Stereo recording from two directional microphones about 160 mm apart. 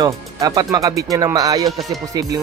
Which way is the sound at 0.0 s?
25° right (ahead or behind).